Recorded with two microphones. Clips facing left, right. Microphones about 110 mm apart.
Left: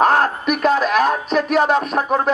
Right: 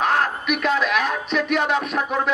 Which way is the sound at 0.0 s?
40° left (ahead or behind).